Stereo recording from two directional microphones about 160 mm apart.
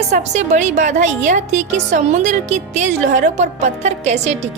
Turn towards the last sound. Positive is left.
turn(degrees=-45)  # may be behind; listen again after turning